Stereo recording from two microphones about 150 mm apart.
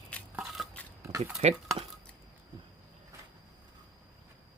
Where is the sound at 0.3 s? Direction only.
Centre (ahead or behind).